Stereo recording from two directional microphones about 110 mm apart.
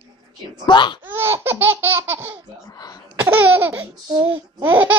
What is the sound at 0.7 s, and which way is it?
Speech, 45° left (ahead or behind).